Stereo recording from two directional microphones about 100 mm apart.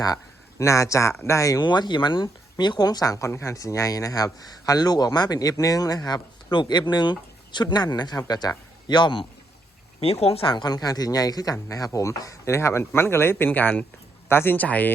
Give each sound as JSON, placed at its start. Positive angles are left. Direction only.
{"t": 0.6, "sound": "speech", "side_deg": 30}
{"t": 1.6, "sound": "speech", "side_deg": 50}
{"t": 10.0, "sound": "speech", "side_deg": 90}
{"t": 10.4, "sound": "speech", "side_deg": 45}